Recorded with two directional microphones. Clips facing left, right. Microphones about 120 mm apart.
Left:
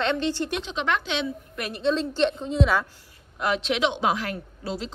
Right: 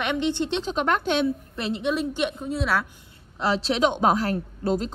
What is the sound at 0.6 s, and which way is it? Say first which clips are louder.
Speech: right 3 dB; 45° right (ahead or behind).